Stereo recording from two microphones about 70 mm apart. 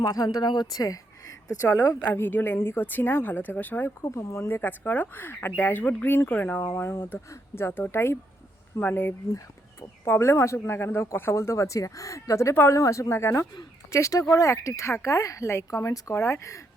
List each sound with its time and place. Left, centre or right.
0.0 s a woman's voice: left
2.0 s speech: left
4.0 s speech: left
10.1 s speech: left
13.9 s speech: left
16.1 s speech: left